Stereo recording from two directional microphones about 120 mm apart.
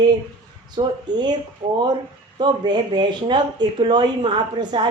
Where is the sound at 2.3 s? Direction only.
40° right (ahead or behind).